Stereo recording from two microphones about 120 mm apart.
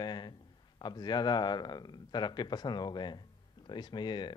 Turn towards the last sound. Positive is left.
turn(degrees=40)  # may be behind; listen again after turning